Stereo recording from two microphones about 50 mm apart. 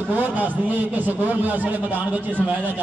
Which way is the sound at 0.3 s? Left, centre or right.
Right.